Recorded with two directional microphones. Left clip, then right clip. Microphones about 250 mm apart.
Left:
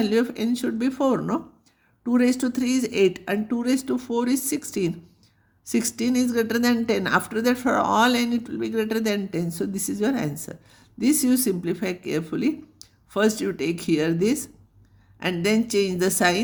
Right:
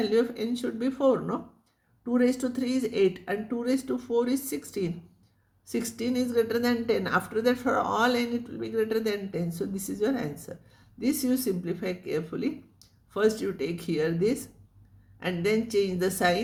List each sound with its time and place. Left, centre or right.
0.0 s speech: left